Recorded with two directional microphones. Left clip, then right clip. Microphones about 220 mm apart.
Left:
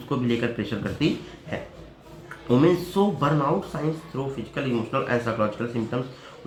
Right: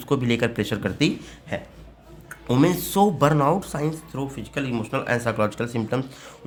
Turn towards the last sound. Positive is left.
turn(degrees=-50)  # may be behind; listen again after turning